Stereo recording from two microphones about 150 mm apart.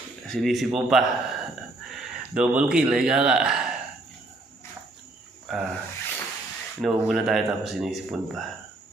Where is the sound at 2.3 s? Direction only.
5° right (ahead or behind).